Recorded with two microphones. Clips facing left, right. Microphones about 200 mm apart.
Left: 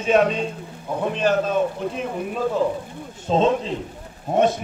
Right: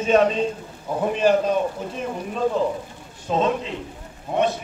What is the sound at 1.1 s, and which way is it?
Speech, 10° right (ahead or behind).